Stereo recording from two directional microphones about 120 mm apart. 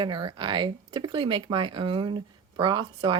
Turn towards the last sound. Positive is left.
turn(degrees=-45)  # may be behind; listen again after turning